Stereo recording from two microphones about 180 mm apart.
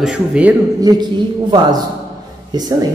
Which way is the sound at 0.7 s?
20° right (ahead or behind).